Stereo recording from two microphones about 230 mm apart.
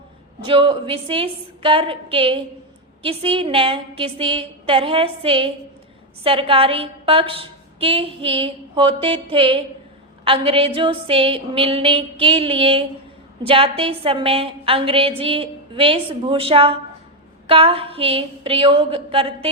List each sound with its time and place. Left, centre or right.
0.4 s a woman's voice: right